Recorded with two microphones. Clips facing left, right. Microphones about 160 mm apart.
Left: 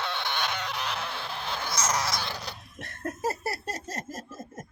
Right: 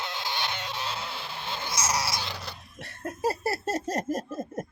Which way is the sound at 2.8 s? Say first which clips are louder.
Left 1 dB; 10° right (ahead or behind).